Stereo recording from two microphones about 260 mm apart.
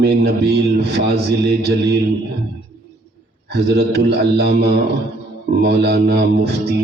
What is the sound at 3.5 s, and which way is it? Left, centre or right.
Speech, right.